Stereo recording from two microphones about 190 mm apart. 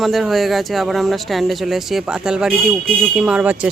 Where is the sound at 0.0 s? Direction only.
Centre (ahead or behind).